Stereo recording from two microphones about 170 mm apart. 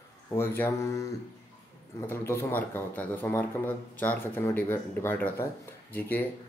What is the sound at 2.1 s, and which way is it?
A man's voice, 15° left (ahead or behind).